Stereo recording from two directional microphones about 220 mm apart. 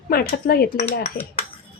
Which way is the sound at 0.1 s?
45° left (ahead or behind).